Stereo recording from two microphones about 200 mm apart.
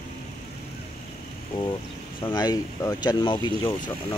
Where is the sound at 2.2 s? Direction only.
20° left (ahead or behind).